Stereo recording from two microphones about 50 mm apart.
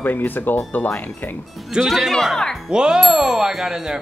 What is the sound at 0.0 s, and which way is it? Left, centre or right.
Speech, left.